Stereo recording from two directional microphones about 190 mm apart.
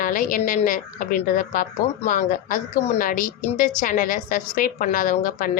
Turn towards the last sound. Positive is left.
turn(degrees=45)  # may be behind; listen again after turning